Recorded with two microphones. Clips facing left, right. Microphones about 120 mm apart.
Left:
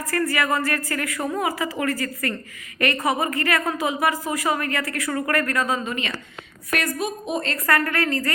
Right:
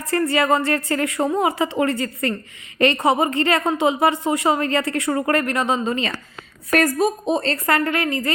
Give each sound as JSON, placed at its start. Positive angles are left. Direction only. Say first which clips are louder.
{"t": 0.0, "sound": "a woman's voice", "louder": "right 4 dB", "side_deg": -25}